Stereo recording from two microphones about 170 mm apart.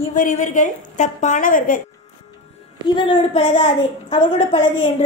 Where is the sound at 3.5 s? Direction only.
40° left (ahead or behind).